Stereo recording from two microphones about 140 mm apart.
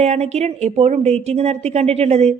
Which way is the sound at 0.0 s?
50° right (ahead or behind).